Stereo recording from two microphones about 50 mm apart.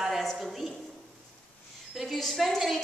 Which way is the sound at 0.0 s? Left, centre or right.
Centre.